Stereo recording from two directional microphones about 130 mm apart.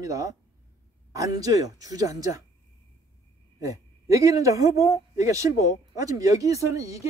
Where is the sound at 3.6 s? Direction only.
25° right (ahead or behind).